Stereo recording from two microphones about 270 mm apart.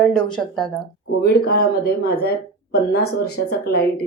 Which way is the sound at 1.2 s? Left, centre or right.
Left.